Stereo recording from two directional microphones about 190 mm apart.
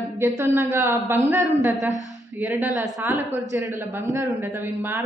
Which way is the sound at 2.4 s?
10° right (ahead or behind).